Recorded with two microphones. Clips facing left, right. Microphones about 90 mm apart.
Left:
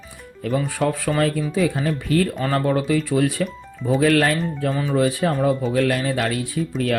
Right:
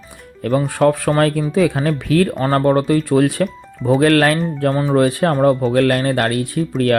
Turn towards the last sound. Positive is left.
turn(degrees=-60)  # may be behind; listen again after turning